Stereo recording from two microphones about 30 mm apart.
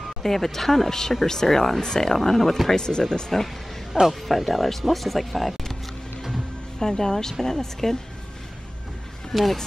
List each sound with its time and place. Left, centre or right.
0.2 s speech: centre
2.7 s speech: left
3.9 s speech: centre
6.8 s speech: centre
9.3 s speech: centre